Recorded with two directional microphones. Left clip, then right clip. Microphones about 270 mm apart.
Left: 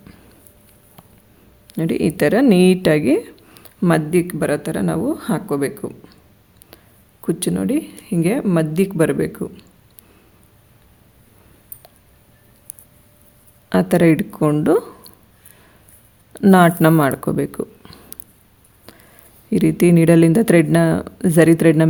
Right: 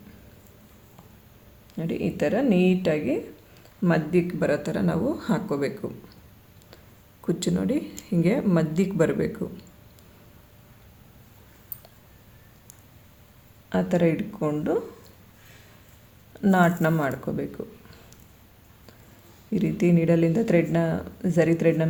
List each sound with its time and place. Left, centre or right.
1.7 s speech: left
7.3 s speech: left
13.7 s speech: left
16.3 s speech: left
19.5 s speech: left